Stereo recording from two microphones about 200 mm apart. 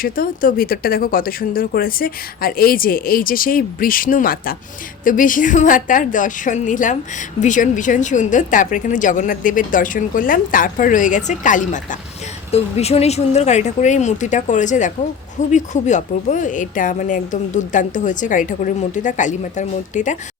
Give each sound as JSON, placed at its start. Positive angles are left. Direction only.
{"t": 0.0, "sound": "a woman's voice", "side_deg": 45}